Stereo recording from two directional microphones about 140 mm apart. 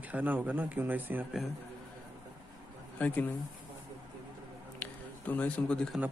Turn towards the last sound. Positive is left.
turn(degrees=5)  # may be behind; listen again after turning